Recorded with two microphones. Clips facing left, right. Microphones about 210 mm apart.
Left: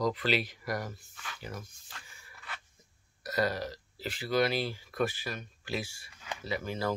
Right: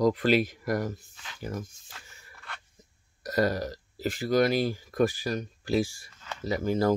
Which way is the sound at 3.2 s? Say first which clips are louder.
Right 5 dB; 45° right (ahead or behind).